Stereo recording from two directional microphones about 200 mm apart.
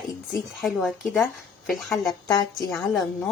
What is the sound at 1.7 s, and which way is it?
Speech, centre (ahead or behind).